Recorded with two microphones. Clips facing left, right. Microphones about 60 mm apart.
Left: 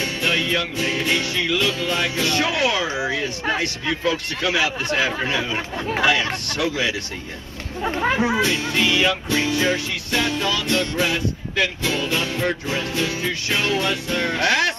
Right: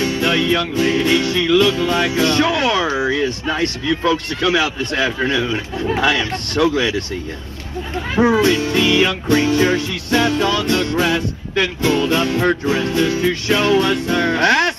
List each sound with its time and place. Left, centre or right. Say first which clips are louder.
0.0 s music: right 5 dB; right
3.6 s speech: right 5 dB; right
4.6 s speech: right 3 dB; left
6.5 s speech: right 8 dB; right
8.2 s music: right 6 dB; right